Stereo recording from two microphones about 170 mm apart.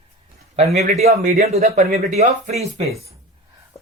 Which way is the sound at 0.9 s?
40° right (ahead or behind).